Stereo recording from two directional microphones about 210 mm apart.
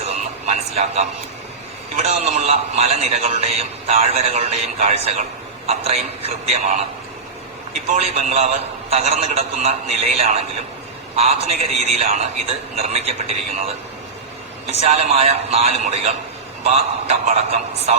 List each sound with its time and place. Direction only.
0.0 s a sound: 30° right (ahead or behind)
2.0 s a man's voice: 30° right (ahead or behind)
7.9 s a man's voice: 30° right (ahead or behind)